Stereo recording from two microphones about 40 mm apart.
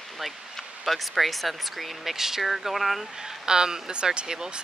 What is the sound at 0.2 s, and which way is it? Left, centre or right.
Speech, centre.